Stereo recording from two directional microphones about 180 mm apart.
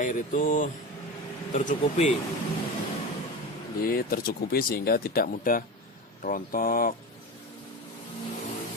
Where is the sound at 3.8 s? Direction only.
55° left (ahead or behind).